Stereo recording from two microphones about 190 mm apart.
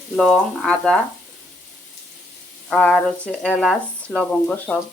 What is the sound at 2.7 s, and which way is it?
Speech, 5° left (ahead or behind).